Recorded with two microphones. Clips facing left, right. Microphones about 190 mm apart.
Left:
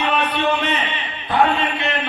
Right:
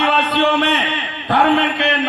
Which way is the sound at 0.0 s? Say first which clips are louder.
Right 4 dB; 70° right (ahead or behind).